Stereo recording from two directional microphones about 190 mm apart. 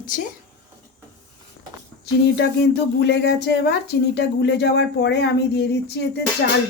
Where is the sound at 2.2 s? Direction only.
60° left (ahead or behind).